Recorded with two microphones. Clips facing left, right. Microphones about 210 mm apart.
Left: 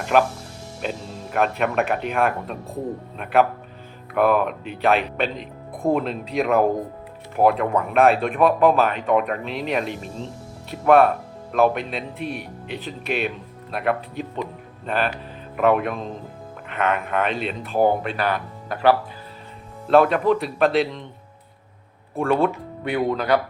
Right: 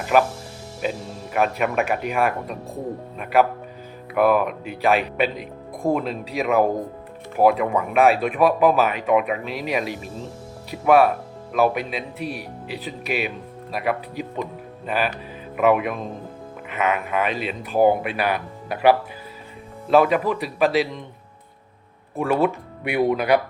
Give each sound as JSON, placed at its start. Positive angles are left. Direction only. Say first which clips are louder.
{"t": 0.0, "sound": "speech", "louder": "even", "side_deg": -5}
{"t": 4.1, "sound": "a man's voice", "louder": "right 1 dB", "side_deg": -5}
{"t": 22.2, "sound": "a man's voice", "louder": "even", "side_deg": -5}